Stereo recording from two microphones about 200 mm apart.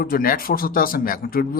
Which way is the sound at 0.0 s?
45° left (ahead or behind).